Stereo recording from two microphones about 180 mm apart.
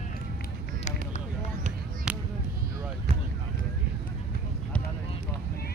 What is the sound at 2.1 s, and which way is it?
Basketball bounce, 5° right (ahead or behind).